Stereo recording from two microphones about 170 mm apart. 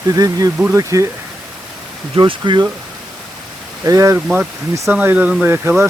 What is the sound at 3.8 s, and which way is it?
Speech, 20° right (ahead or behind).